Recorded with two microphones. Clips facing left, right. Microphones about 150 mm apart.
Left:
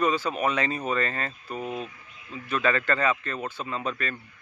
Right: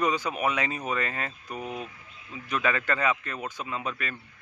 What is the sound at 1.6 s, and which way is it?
Speech, 20° left (ahead or behind).